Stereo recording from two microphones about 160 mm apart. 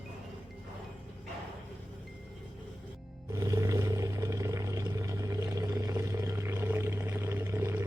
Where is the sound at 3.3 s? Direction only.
20° right (ahead or behind).